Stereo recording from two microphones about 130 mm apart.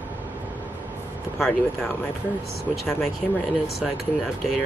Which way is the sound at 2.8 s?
Centre (ahead or behind).